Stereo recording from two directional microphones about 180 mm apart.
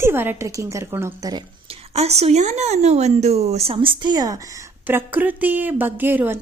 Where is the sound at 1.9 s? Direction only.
35° right (ahead or behind).